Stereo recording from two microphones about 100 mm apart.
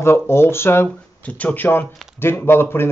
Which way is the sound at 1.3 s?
15° left (ahead or behind).